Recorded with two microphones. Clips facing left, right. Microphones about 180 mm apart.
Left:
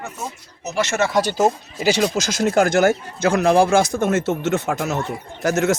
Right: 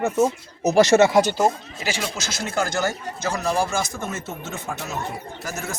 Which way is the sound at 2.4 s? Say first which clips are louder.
Left 8 dB; 55° left (ahead or behind).